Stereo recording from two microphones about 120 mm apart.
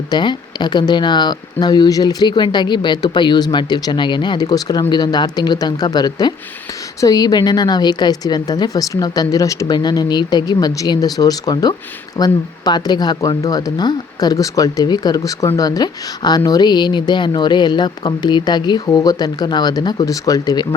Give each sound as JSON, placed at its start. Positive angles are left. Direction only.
{"t": 0.1, "sound": "speech", "side_deg": 40}